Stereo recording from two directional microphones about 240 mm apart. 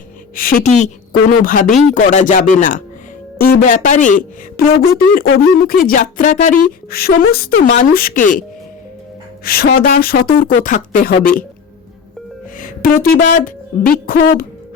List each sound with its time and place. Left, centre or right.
0.3 s a woman's voice: left
12.5 s speech: left